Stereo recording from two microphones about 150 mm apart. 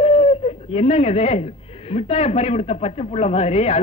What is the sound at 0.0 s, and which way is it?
Speech, 45° left (ahead or behind).